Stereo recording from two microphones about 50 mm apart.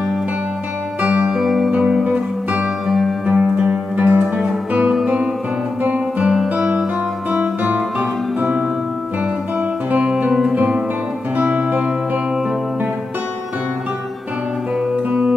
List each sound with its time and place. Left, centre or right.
1.2 s music: centre
1.7 s music: right
3.3 s music: right
5.0 s music: centre
5.9 s guitar: right
6.5 s music: right
7.2 s guitar: right
9.6 s guitar: right
11.3 s music: right
15.0 s music: right